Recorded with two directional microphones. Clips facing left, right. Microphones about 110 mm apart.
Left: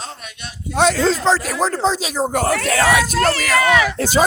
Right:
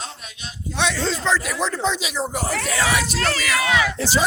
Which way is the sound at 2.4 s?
60° left (ahead or behind).